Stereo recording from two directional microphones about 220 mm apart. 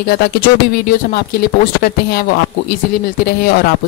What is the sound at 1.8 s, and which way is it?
Speech, 45° left (ahead or behind).